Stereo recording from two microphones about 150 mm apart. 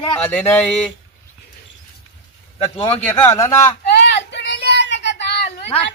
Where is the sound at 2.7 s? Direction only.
40° left (ahead or behind).